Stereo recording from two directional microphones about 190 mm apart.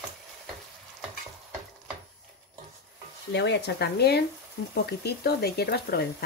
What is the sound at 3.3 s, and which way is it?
Speech, 65° left (ahead or behind).